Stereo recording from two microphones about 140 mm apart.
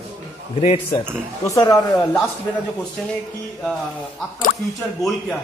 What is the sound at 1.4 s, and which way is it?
Speech, 25° left (ahead or behind).